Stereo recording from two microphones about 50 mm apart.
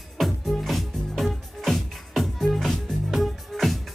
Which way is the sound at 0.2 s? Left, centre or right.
Centre.